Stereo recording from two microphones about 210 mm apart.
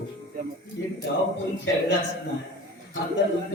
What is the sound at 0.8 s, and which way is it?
Speech, 60° left (ahead or behind).